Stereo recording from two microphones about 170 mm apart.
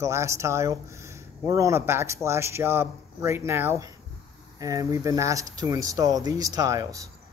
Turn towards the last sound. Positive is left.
turn(degrees=-20)  # may be behind; listen again after turning